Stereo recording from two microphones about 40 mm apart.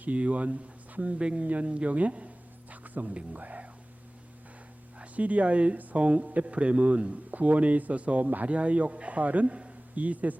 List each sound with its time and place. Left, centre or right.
0.0 s speech: right
1.2 s a man's voice: right
1.6 s a sound: right
3.3 s speech: right
4.9 s speech: right